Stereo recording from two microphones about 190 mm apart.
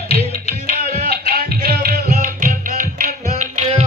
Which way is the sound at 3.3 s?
35° right (ahead or behind).